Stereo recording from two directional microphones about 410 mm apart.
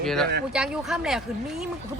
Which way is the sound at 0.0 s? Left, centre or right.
Centre.